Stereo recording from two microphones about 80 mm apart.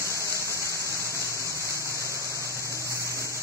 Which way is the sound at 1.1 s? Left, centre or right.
Right.